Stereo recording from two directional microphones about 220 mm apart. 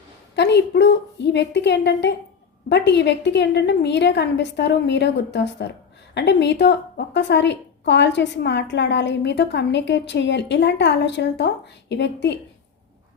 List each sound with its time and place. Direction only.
0.3 s a woman's voice: 50° left (ahead or behind)